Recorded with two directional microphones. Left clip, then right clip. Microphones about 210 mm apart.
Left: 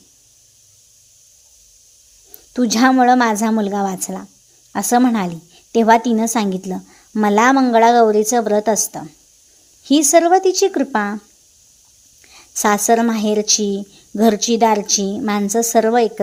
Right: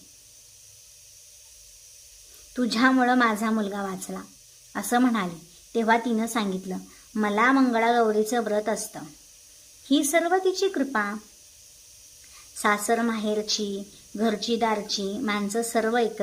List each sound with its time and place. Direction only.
2.5 s a woman's voice: 30° left (ahead or behind)
12.6 s a woman's voice: 30° left (ahead or behind)